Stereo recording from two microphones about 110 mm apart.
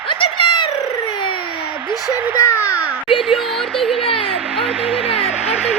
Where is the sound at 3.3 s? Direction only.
Centre (ahead or behind).